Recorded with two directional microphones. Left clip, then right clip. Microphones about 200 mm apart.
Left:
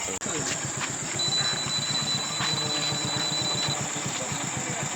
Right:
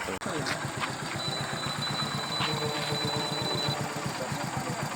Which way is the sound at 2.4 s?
Centre (ahead or behind).